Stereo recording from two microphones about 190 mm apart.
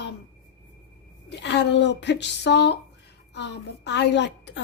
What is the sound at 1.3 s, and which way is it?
A woman's voice, 65° left (ahead or behind).